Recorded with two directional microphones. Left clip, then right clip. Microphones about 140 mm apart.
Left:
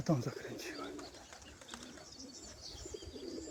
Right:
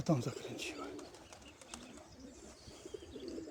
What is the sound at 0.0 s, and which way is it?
Speech, 15° right (ahead or behind).